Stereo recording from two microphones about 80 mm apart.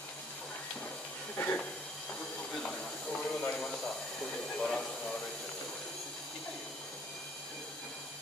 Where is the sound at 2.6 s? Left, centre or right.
Centre.